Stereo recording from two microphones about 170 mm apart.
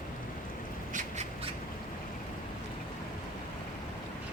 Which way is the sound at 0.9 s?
50° right (ahead or behind).